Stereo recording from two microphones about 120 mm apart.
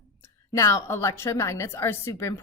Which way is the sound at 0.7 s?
20° left (ahead or behind).